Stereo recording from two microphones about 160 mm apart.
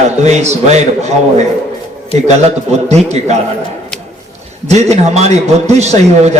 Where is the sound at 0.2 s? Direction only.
45° right (ahead or behind).